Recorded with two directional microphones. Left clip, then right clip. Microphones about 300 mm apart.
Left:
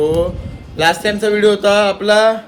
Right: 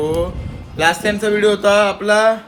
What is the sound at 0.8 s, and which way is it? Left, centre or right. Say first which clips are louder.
Speech: left 2 dB; centre.